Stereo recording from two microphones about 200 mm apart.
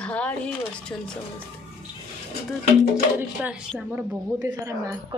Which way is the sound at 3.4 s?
5° right (ahead or behind).